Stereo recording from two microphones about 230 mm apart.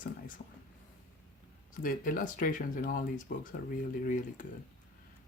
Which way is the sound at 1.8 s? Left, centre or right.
Left.